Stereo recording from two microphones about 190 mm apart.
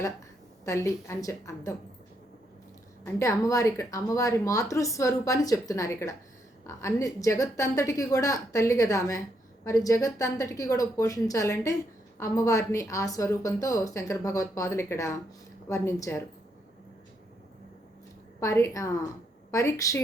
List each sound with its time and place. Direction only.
0.6 s a woman's voice: 15° left (ahead or behind)
3.0 s a woman's voice: 15° left (ahead or behind)
18.3 s a woman's voice: 15° left (ahead or behind)